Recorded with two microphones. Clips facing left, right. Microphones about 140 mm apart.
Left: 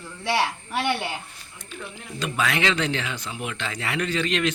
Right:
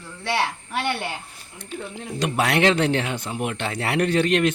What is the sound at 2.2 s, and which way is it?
Speech, 65° right (ahead or behind).